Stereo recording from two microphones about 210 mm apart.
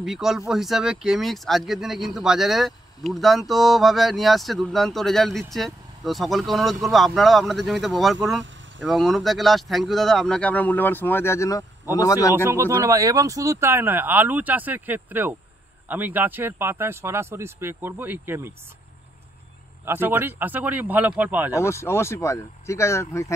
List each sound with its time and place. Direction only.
0.0 s speech: centre (ahead or behind); by 12.4 s 15° left (ahead or behind)
12.4 s speech: 15° right (ahead or behind)
19.8 s speech: 10° right (ahead or behind)
21.5 s speech: 15° left (ahead or behind)